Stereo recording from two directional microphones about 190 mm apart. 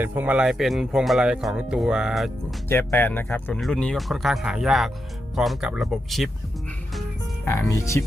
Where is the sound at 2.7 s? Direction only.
10° left (ahead or behind).